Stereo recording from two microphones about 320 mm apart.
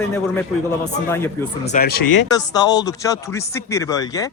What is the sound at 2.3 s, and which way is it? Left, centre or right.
A man's voice, centre.